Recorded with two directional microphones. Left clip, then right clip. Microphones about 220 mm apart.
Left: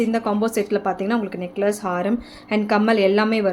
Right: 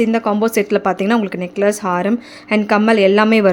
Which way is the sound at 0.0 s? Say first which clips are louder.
Right 6 dB; 25° right (ahead or behind).